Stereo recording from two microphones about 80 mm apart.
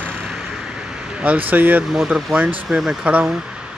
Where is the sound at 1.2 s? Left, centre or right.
Right.